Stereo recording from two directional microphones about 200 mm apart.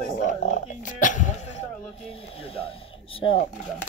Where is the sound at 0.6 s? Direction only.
40° left (ahead or behind).